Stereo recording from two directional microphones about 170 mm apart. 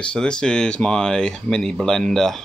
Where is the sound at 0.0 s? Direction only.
5° left (ahead or behind).